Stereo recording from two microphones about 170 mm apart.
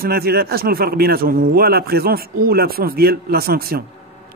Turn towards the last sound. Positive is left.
turn(degrees=-60)  # may be behind; listen again after turning